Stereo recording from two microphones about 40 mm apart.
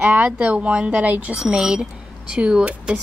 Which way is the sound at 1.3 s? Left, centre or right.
Centre.